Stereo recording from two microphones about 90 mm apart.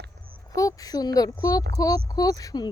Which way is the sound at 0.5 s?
40° left (ahead or behind).